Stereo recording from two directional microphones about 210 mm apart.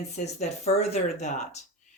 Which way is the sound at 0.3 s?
30° left (ahead or behind).